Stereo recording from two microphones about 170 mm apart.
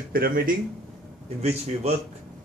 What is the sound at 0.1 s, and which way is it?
Speech, 60° right (ahead or behind).